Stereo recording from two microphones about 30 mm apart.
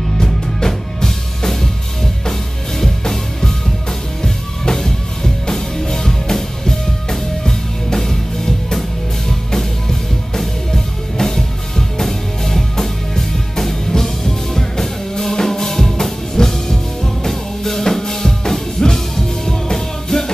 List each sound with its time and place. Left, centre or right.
0.2 s music: centre
2.8 s music: centre